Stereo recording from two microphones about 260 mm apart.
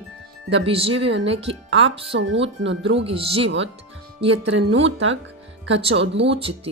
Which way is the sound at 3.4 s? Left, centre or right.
Right.